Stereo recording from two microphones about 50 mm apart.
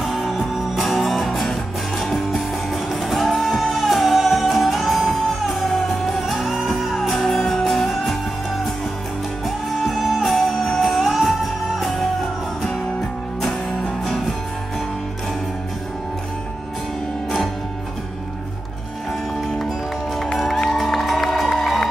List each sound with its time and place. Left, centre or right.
0.0 s music: centre
9.7 s music: centre
20.3 s music: centre